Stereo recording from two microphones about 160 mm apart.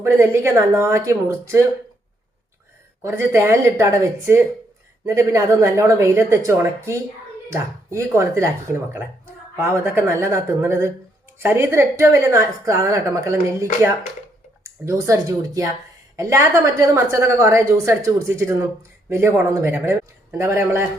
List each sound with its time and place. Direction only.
0.0 s a woman's voice: 15° right (ahead or behind)
3.0 s a woman's voice: 15° right (ahead or behind)